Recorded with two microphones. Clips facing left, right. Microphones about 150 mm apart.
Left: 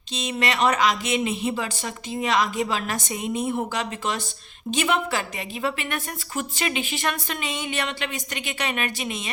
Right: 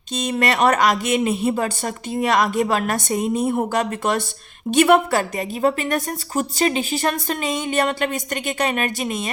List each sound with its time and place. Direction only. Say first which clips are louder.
0.2 s a woman's voice: right 4 dB; 50° right (ahead or behind)